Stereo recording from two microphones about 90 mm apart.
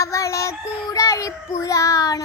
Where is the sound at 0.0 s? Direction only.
35° left (ahead or behind).